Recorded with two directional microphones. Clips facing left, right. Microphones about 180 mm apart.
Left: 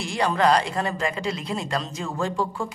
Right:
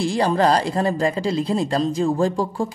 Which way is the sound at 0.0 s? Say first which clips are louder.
Right 4 dB; 30° right (ahead or behind).